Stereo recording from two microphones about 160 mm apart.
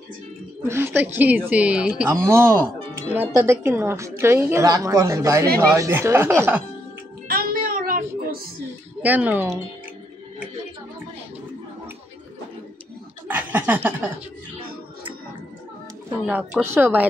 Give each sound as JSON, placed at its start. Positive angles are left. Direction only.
{"t": 0.7, "sound": "speech", "side_deg": -15}
{"t": 2.2, "sound": "speech", "side_deg": -20}
{"t": 7.2, "sound": "a sound", "side_deg": -65}
{"t": 9.0, "sound": "speech", "side_deg": -10}
{"t": 13.3, "sound": "a sound", "side_deg": -10}
{"t": 16.3, "sound": "speech", "side_deg": -10}